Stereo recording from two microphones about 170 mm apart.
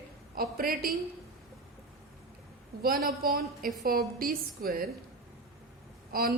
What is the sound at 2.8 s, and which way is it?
A woman's voice, 60° right (ahead or behind).